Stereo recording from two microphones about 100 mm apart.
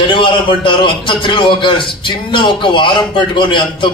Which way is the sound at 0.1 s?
55° left (ahead or behind).